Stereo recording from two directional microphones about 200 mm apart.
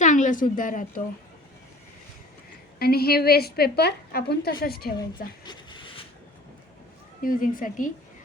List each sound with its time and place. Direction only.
0.0 s a woman's voice: 40° left (ahead or behind)
2.7 s a woman's voice: 50° left (ahead or behind)
7.2 s a woman's voice: 45° left (ahead or behind)